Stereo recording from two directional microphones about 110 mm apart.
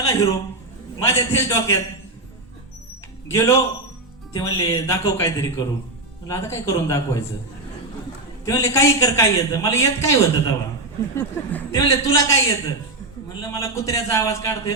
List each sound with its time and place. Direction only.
0.1 s a man's voice: 30° left (ahead or behind)
3.2 s a man's voice: 25° left (ahead or behind)
8.4 s a man's voice: 25° left (ahead or behind)